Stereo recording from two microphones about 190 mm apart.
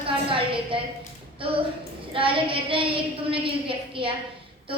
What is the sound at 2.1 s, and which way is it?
A woman's voice, 30° right (ahead or behind).